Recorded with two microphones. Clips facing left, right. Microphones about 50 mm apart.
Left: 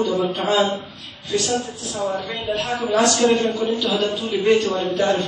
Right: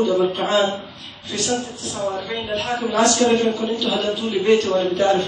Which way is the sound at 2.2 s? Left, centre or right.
Right.